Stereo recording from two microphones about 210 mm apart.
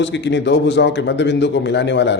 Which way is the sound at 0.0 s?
55° left (ahead or behind).